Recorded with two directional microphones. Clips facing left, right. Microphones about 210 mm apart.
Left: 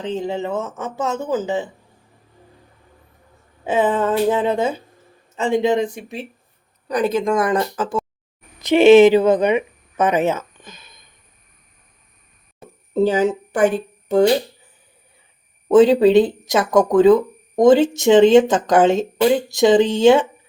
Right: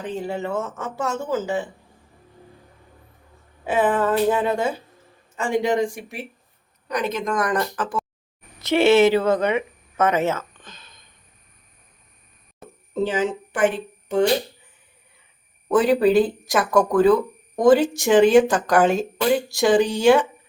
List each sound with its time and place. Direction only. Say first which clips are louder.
0.0 s speech: left 4 dB; 20° left (ahead or behind)
3.6 s speech: left 2 dB; 20° left (ahead or behind)
6.8 s speech: left 6 dB; 35° left (ahead or behind); by 11.0 s 10° left (ahead or behind)
12.9 s speech: left 6 dB; 40° left (ahead or behind)
15.7 s speech: left 5 dB; 25° left (ahead or behind)